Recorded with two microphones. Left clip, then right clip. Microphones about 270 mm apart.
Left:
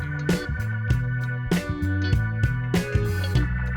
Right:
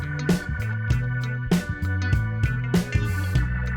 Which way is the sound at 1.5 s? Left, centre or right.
Centre.